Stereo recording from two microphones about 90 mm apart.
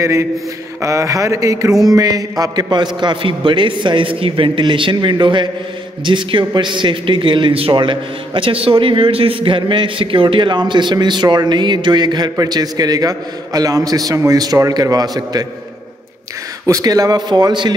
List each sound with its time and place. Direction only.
0.0 s a man's voice: 35° right (ahead or behind)
16.6 s a man's voice: 40° right (ahead or behind)